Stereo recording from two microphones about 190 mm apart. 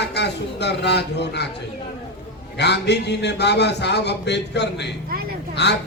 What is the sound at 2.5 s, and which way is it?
A man's voice, 65° left (ahead or behind).